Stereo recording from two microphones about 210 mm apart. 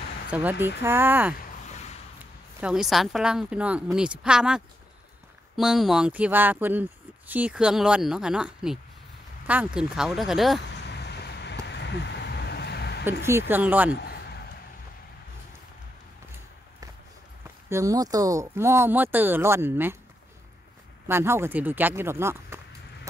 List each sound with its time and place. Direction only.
0.3 s speech: 10° right (ahead or behind)
2.6 s speech: 5° right (ahead or behind)
10.7 s vehicle: 55° left (ahead or behind)
13.2 s speech: 10° right (ahead or behind)
13.9 s a sound: 50° left (ahead or behind)
17.6 s speech: 15° right (ahead or behind)
21.1 s speech: 10° right (ahead or behind)